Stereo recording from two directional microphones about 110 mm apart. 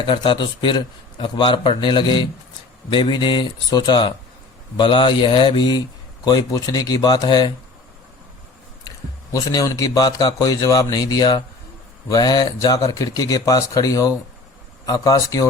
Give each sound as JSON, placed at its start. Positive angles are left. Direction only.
{"t": 0.0, "sound": "a man's voice", "side_deg": 45}
{"t": 9.3, "sound": "a man's voice", "side_deg": 35}